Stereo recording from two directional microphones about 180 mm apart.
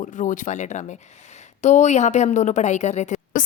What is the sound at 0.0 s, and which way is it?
A woman's voice, 45° left (ahead or behind).